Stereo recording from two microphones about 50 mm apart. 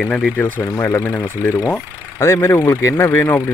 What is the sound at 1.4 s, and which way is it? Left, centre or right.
Speech, left.